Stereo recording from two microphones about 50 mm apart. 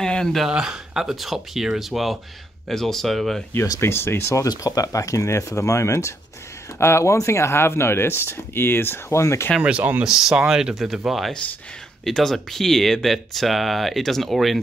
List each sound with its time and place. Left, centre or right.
0.0 s a sound: centre
0.5 s speech: centre
3.5 s speech: left
4.9 s speech: left
6.8 s speech: left
9.1 s speech: left
9.6 s speech: right
10.0 s speech: centre
12.0 s speech: centre